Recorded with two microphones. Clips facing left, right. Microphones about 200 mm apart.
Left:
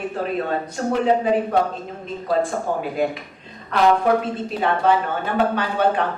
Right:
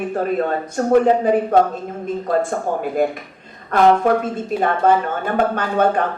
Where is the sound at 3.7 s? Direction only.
45° right (ahead or behind).